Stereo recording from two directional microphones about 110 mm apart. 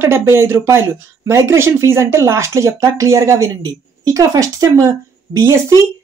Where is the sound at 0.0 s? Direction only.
20° right (ahead or behind).